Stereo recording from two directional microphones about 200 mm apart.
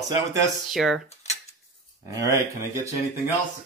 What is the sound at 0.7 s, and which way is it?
Speech, centre (ahead or behind).